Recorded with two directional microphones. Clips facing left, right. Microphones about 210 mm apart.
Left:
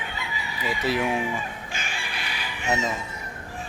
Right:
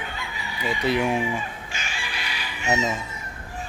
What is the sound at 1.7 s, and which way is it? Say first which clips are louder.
Chicken: even; 55° left (ahead or behind).